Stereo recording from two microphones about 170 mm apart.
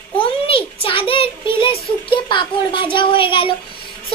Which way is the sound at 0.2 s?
30° left (ahead or behind).